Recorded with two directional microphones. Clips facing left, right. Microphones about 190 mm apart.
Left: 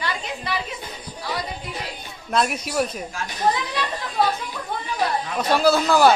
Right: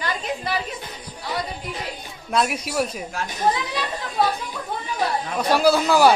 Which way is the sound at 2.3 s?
5° right (ahead or behind).